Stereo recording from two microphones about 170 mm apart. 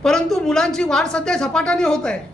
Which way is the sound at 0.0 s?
Centre (ahead or behind).